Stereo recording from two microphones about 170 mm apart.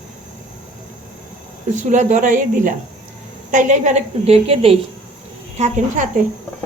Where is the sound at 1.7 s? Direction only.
45° right (ahead or behind).